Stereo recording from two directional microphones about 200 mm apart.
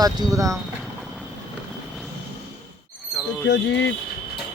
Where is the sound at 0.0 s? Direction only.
20° right (ahead or behind).